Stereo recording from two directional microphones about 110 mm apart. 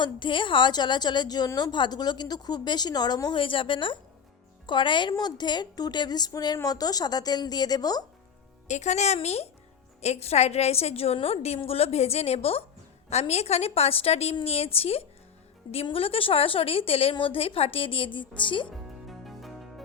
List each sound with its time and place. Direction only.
0.0 s a woman's voice: 45° left (ahead or behind)
8.6 s a woman's voice: 90° left; by 12.6 s 65° left (ahead or behind)
13.1 s a woman's voice: 75° left (ahead or behind); by 18.7 s 50° left (ahead or behind)
18.7 s music: centre (ahead or behind)